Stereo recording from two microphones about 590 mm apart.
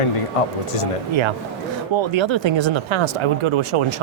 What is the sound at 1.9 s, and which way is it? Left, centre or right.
Speech, right.